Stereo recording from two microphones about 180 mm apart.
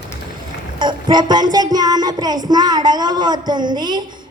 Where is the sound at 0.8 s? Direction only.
25° right (ahead or behind).